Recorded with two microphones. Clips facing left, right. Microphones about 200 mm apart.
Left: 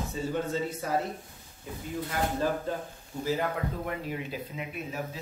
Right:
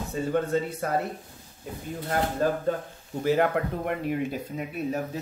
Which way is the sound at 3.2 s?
65° right (ahead or behind).